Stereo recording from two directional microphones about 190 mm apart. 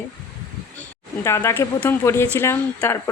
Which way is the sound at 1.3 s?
15° left (ahead or behind).